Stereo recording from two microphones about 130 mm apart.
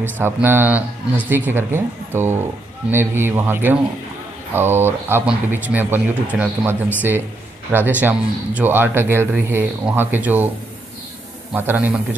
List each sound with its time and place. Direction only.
0.0 s speech: 15° right (ahead or behind)
11.5 s speech: 15° right (ahead or behind)